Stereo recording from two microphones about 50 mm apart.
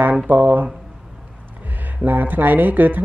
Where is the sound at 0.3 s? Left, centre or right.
Right.